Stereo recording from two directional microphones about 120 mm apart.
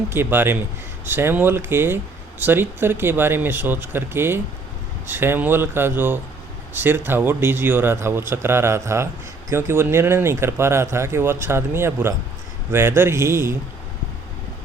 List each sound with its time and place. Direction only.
0.1 s speech: 20° right (ahead or behind)